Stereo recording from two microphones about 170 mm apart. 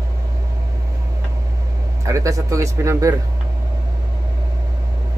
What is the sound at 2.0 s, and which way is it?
Speech, 20° right (ahead or behind).